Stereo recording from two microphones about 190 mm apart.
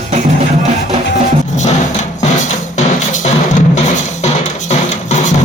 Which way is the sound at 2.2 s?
40° left (ahead or behind).